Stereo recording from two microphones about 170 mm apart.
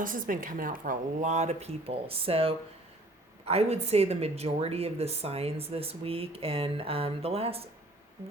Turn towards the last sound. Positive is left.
turn(degrees=-35)  # may be behind; listen again after turning